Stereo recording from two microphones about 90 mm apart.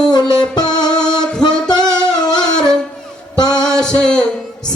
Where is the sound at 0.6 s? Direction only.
50° left (ahead or behind).